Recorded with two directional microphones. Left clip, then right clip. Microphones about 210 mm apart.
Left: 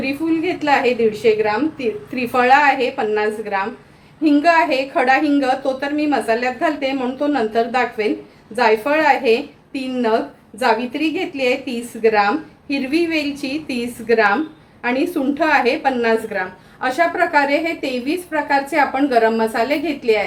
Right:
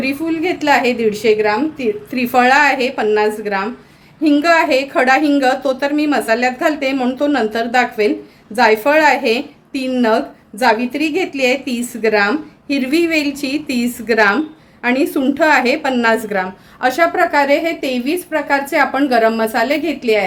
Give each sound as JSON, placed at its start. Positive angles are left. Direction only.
{"t": 0.0, "sound": "a woman's voice", "side_deg": -55}